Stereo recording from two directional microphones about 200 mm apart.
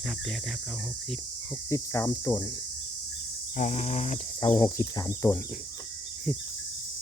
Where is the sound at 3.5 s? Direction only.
35° left (ahead or behind).